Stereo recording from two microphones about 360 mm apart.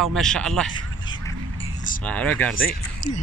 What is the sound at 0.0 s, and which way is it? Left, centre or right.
Speech, centre.